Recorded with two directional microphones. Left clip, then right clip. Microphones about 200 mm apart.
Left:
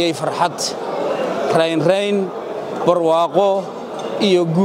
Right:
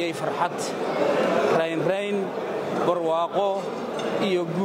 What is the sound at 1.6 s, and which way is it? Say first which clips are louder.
A man's voice: left 8 dB; 45° left (ahead or behind).